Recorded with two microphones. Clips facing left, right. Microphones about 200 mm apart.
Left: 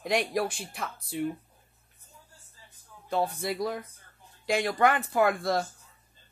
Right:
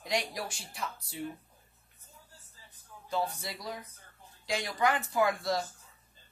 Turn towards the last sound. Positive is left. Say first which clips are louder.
# left 4 dB
turn(degrees=55)  # may be behind; listen again after turning